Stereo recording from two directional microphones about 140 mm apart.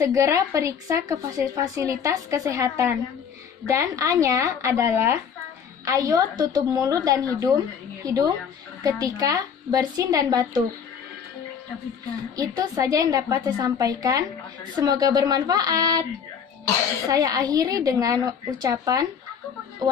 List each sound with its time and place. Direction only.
0.0 s a woman's voice: 25° right (ahead or behind)
12.4 s a woman's voice: 30° right (ahead or behind)
17.1 s a woman's voice: 25° right (ahead or behind)